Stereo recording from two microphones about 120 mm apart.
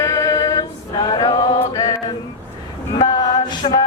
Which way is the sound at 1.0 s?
35° left (ahead or behind).